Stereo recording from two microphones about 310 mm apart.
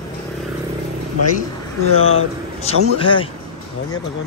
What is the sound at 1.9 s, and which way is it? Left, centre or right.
Speech, left.